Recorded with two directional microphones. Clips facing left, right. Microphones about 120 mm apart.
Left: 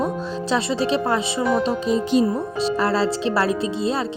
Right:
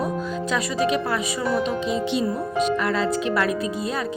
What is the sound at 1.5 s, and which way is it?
Speech, 40° left (ahead or behind).